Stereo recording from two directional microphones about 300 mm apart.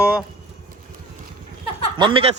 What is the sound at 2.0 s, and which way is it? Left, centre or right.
Speech, centre.